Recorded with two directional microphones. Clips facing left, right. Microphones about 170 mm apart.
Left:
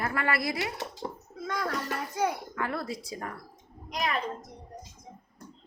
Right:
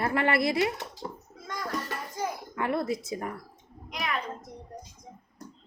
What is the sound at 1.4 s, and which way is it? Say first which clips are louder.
Speech: left 5 dB; 65° left (ahead or behind).